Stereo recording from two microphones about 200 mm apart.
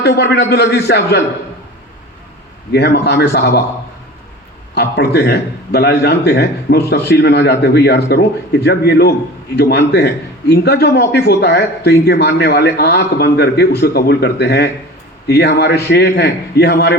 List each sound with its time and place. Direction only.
0.0 s a man's voice: 55° left (ahead or behind)
2.7 s speech: 55° left (ahead or behind)
4.7 s a man's voice: 55° left (ahead or behind)